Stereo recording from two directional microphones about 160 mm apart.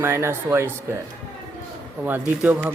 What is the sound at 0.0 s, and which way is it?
Speech, 15° right (ahead or behind).